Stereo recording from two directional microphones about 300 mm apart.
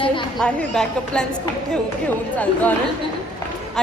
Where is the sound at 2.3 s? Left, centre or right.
Centre.